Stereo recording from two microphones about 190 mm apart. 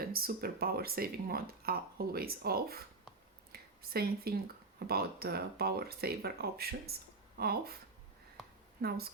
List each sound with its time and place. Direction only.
0.0 s speech: 50° right (ahead or behind)
3.5 s a sound: 55° right (ahead or behind)
4.9 s speech: 55° right (ahead or behind)
8.8 s speech: 55° right (ahead or behind)